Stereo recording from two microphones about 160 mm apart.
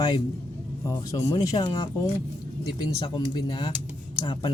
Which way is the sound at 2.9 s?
25° left (ahead or behind).